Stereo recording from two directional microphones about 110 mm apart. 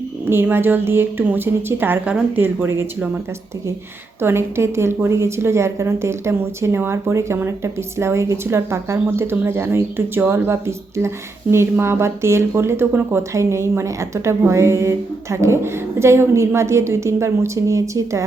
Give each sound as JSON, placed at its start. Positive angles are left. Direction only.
{"t": 0.3, "sound": "a woman's voice", "side_deg": -20}
{"t": 4.2, "sound": "a woman's voice", "side_deg": -20}